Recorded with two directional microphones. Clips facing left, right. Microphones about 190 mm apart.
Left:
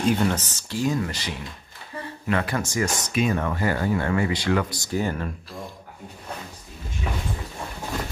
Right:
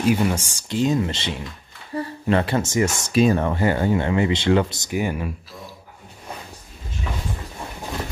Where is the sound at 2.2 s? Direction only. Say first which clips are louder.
Right 4 dB; 30° right (ahead or behind); by 5.3 s 10° right (ahead or behind).